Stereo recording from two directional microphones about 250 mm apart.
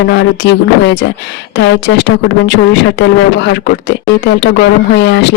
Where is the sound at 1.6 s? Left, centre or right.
Left.